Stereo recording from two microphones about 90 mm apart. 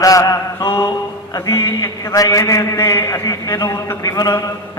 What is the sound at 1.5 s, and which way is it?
Mantra, 45° left (ahead or behind).